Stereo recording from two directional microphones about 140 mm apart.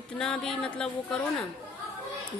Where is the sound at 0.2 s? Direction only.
5° left (ahead or behind).